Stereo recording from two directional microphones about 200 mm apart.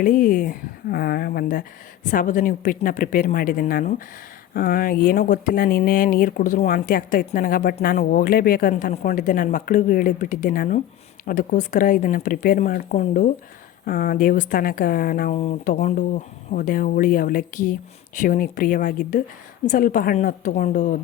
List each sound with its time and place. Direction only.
0.0 s a woman's voice: 45° left (ahead or behind)